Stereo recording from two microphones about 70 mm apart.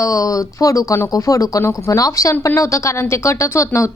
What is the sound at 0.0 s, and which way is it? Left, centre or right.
A woman's voice, left.